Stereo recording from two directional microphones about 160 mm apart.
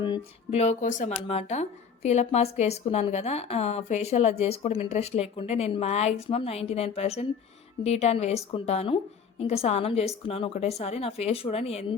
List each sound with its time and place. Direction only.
0.5 s speech: 45° left (ahead or behind)
1.3 s a woman's voice: 40° left (ahead or behind)